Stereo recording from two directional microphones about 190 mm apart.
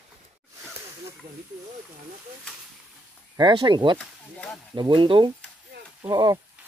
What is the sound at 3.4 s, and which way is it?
Speech, 25° right (ahead or behind).